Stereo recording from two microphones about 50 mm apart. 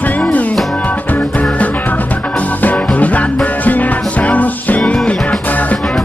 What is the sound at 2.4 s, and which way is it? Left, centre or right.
Music, left.